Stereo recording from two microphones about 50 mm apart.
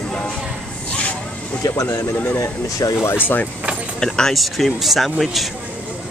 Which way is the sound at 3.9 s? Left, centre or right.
Centre.